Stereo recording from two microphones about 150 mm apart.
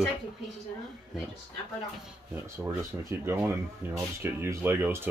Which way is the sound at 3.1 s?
15° right (ahead or behind).